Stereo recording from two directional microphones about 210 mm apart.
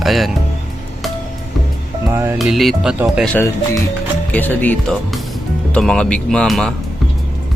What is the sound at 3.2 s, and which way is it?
Speech, 10° left (ahead or behind).